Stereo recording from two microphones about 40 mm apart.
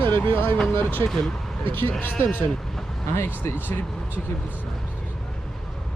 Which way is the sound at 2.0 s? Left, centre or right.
Left.